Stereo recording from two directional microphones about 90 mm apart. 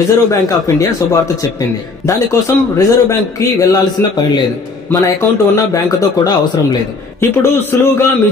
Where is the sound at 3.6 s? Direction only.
45° left (ahead or behind).